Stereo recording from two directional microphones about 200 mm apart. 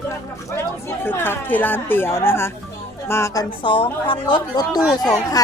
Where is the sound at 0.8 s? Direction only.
10° left (ahead or behind).